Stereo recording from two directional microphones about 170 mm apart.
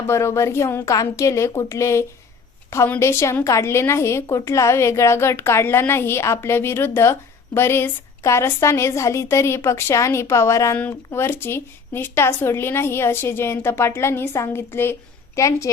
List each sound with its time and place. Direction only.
0.1 s a woman's voice: 15° left (ahead or behind)